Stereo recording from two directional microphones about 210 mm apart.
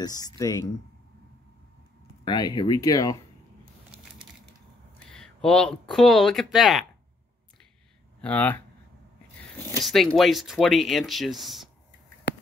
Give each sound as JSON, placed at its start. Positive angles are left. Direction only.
{"t": 0.0, "sound": "speech", "side_deg": 15}
{"t": 2.2, "sound": "speech", "side_deg": 20}
{"t": 4.9, "sound": "speech", "side_deg": 5}
{"t": 8.2, "sound": "speech", "side_deg": 5}
{"t": 9.8, "sound": "speech", "side_deg": 0}